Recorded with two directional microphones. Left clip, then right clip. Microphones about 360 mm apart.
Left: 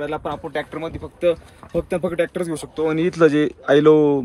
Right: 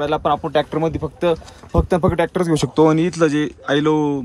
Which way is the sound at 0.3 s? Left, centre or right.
Right.